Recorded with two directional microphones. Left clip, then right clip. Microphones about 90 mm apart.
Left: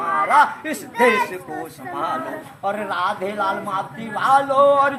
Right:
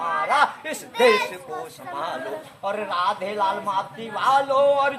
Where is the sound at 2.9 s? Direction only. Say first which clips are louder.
Left 1 dB; 25° right (ahead or behind).